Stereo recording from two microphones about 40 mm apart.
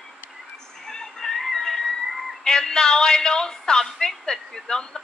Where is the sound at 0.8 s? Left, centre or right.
Centre.